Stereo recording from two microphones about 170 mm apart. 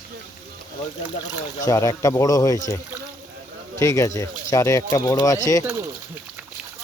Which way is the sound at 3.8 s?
20° left (ahead or behind).